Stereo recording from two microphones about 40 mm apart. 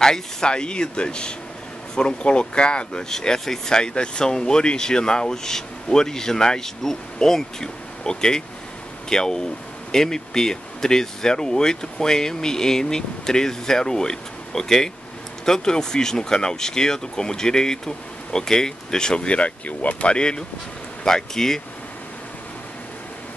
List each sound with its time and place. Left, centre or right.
0.0 s speech: centre
3.1 s speech: centre; by 20.2 s left
20.2 s speech: left